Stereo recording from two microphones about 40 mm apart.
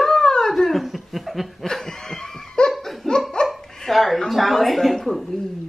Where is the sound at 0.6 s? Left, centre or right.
Centre.